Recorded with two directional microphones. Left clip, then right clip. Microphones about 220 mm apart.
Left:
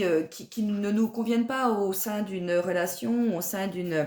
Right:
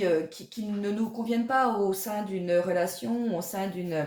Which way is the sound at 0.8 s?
40° left (ahead or behind).